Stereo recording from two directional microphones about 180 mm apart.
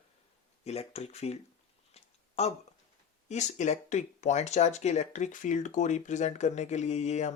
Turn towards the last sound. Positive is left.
turn(degrees=40)  # may be behind; listen again after turning